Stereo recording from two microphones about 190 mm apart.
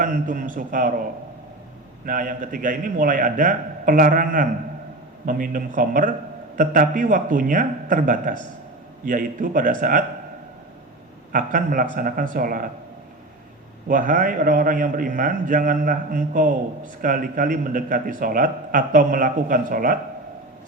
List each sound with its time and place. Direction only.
0.0 s a man's voice: 45° right (ahead or behind)
2.0 s a man's voice: 45° right (ahead or behind)
11.3 s a man's voice: 45° right (ahead or behind)
13.8 s a man's voice: 45° right (ahead or behind)